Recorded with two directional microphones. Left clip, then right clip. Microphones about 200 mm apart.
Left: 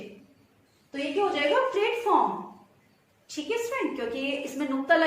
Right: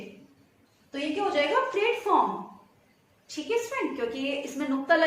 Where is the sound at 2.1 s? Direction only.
10° left (ahead or behind).